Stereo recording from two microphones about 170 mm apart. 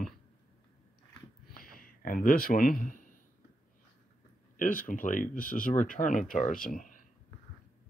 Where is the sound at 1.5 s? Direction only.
60° left (ahead or behind).